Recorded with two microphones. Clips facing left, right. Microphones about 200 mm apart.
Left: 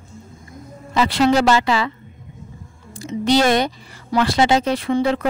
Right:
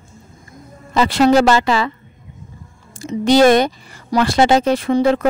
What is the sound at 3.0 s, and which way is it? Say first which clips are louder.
Speech: right 5 dB; 45° right (ahead or behind).